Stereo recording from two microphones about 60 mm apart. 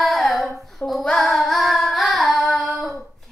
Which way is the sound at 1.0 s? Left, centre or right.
Centre.